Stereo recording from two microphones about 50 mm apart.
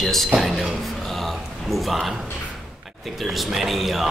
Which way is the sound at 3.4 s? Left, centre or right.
Centre.